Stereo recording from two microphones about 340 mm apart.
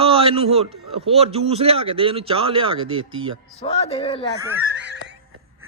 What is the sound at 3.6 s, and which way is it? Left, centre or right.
Speech, centre.